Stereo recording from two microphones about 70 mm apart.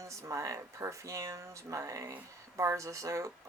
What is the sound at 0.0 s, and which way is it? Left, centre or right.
Speech, right.